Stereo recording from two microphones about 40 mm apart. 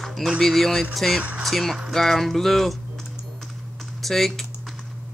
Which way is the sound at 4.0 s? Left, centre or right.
Centre.